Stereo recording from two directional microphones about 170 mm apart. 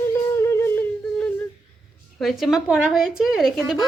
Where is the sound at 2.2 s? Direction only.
Centre (ahead or behind).